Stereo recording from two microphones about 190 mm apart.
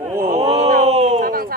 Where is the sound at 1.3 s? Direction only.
50° right (ahead or behind).